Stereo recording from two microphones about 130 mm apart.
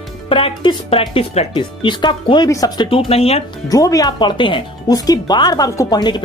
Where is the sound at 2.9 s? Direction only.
50° left (ahead or behind).